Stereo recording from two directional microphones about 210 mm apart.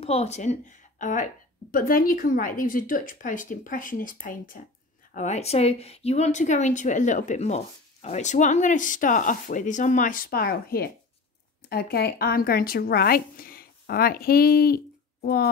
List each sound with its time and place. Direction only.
0.0 s a woman's voice: 30° left (ahead or behind); by 15.5 s 50° left (ahead or behind)